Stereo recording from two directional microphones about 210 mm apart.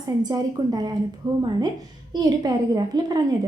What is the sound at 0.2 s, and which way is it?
A woman's voice, 20° right (ahead or behind).